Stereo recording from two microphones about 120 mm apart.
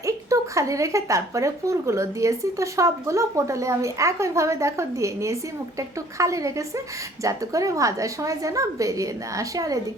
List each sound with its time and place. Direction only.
0.0 s speech: 25° right (ahead or behind)